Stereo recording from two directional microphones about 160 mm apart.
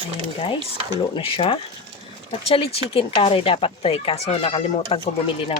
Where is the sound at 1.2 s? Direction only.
35° left (ahead or behind).